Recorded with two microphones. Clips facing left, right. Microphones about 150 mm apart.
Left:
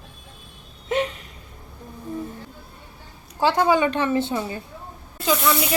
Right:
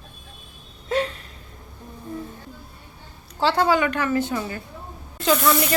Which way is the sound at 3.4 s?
15° left (ahead or behind).